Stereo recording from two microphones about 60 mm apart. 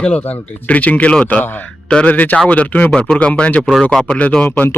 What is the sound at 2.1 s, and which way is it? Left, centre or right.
Speech, left.